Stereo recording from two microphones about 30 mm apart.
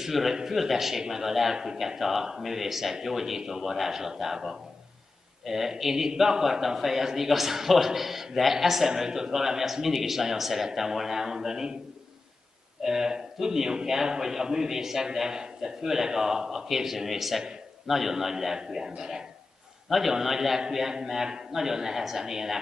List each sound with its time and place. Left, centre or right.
0.0 s a man's voice: centre
12.8 s a man's voice: centre
19.9 s a man's voice: centre